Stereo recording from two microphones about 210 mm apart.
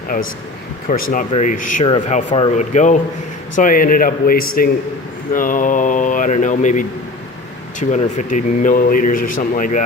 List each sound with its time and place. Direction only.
0.9 s speech: 40° left (ahead or behind)